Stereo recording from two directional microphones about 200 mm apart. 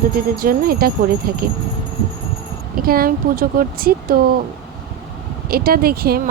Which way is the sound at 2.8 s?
45° right (ahead or behind).